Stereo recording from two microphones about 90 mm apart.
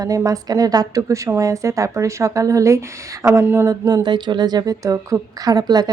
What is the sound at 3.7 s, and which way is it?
Speech, 50° right (ahead or behind).